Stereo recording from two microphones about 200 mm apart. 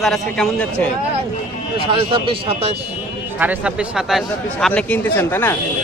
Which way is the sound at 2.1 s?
25° right (ahead or behind).